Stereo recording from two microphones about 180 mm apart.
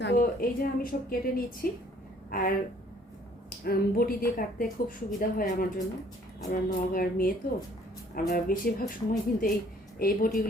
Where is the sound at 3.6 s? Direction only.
55° left (ahead or behind).